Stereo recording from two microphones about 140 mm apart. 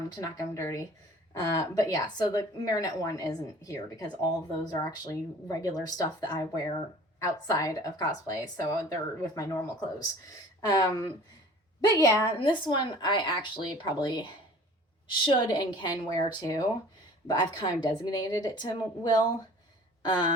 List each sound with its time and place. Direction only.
0.3 s a woman's voice: 20° left (ahead or behind)
10.7 s a woman's voice: 25° left (ahead or behind)
12.4 s a woman's voice: 35° left (ahead or behind)
20.0 s a sound: 30° left (ahead or behind)